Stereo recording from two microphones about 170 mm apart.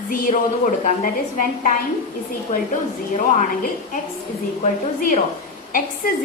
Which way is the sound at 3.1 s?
50° left (ahead or behind).